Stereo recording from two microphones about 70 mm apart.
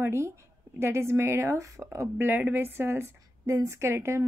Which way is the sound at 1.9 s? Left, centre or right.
Right.